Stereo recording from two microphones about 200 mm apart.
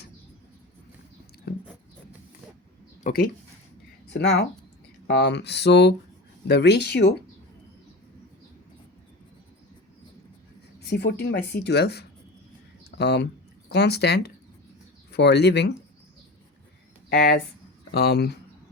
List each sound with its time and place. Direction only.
3.0 s speech: 45° left (ahead or behind)
4.1 s speech: 55° left (ahead or behind)
10.8 s speech: 55° left (ahead or behind)
12.8 s a sound: 55° left (ahead or behind)
13.7 s speech: 55° left (ahead or behind)
17.9 s speech: 50° left (ahead or behind)